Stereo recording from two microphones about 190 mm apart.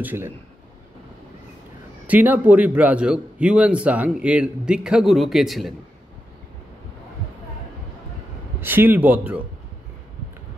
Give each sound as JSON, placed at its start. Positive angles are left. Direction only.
{"t": 0.0, "sound": "a man's voice", "side_deg": -10}
{"t": 2.0, "sound": "a man's voice", "side_deg": -10}
{"t": 8.5, "sound": "a man's voice", "side_deg": -10}